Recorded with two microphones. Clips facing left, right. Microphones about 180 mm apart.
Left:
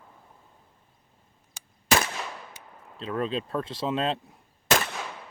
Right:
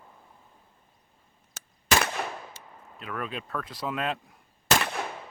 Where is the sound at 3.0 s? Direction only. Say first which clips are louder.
Left 6 dB; 25° left (ahead or behind).